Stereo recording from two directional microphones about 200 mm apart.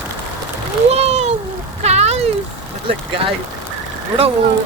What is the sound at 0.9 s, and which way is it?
Splash, 30° right (ahead or behind).